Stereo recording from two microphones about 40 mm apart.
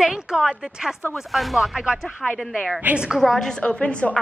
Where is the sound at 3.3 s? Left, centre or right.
Centre.